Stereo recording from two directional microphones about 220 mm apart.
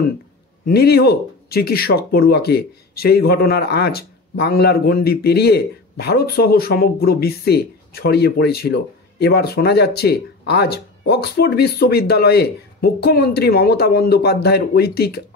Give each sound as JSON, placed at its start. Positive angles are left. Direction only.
{"t": 0.7, "sound": "speech", "side_deg": 45}